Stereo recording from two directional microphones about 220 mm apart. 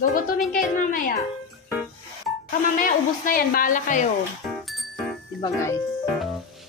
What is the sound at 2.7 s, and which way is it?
A woman's voice, 40° left (ahead or behind).